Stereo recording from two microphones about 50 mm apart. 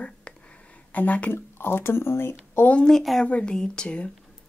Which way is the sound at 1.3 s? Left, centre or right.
Left.